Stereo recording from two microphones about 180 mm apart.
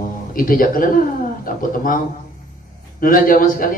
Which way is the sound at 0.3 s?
50° left (ahead or behind).